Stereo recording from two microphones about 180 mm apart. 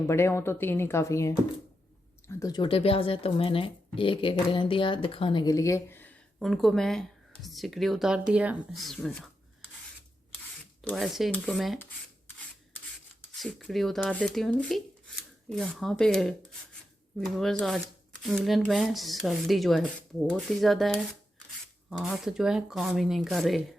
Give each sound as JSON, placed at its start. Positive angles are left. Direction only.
{"t": 0.1, "sound": "speech", "side_deg": 15}
{"t": 10.8, "sound": "speech", "side_deg": 0}
{"t": 13.4, "sound": "speech", "side_deg": 0}